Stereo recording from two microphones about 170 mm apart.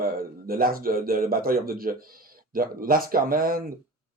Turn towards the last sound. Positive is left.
turn(degrees=-60)  # may be behind; listen again after turning